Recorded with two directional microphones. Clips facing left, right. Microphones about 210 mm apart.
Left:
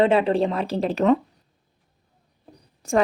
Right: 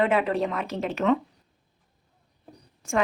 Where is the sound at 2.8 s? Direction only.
35° left (ahead or behind).